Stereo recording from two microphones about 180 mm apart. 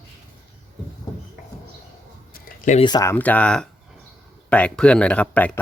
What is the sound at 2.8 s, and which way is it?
Speech, 20° left (ahead or behind).